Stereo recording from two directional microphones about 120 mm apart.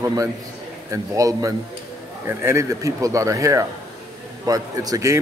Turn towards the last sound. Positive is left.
turn(degrees=-30)  # may be behind; listen again after turning